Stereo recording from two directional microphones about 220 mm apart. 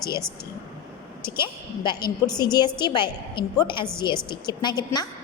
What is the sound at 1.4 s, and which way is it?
A woman's voice, 20° left (ahead or behind).